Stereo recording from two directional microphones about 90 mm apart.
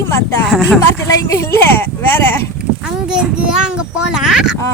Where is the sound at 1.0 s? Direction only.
30° left (ahead or behind).